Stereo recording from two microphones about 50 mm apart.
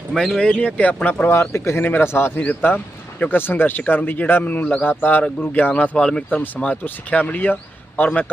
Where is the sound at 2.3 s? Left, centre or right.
Left.